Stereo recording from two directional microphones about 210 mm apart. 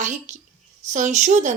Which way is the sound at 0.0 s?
35° right (ahead or behind).